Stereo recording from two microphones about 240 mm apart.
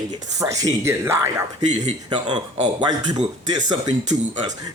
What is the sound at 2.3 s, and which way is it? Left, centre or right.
Speech, centre.